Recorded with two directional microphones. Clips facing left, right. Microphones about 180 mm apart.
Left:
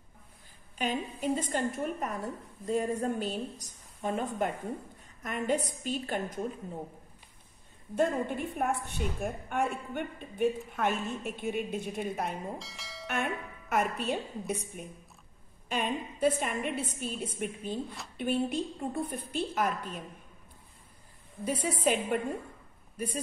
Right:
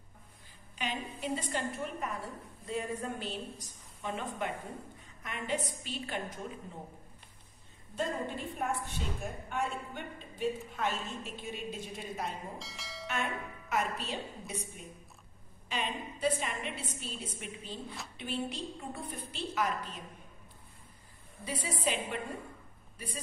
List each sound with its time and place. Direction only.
0.7 s a woman's voice: 45° left (ahead or behind)
7.9 s a woman's voice: 60° left (ahead or behind)
12.5 s bell: centre (ahead or behind)
13.1 s a woman's voice: 55° left (ahead or behind)
15.7 s a woman's voice: 50° left (ahead or behind)
17.8 s speech: centre (ahead or behind)
18.1 s a woman's voice: 50° left (ahead or behind)
21.5 s a woman's voice: 50° left (ahead or behind)